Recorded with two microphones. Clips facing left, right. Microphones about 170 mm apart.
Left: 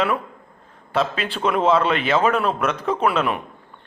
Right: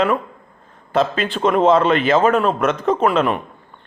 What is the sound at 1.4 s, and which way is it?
Speech, 35° right (ahead or behind).